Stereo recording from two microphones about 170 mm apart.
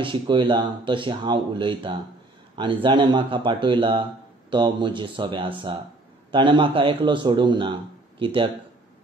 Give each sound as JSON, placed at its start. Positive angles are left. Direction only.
{"t": 0.0, "sound": "a man's voice", "side_deg": -30}